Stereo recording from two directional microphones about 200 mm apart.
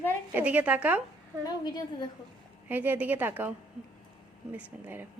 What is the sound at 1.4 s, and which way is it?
Speech, 20° left (ahead or behind).